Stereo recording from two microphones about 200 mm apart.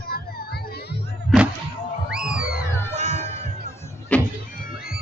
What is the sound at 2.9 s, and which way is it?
Cat, 35° right (ahead or behind).